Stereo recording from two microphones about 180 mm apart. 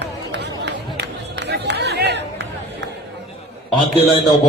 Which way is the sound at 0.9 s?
70° right (ahead or behind).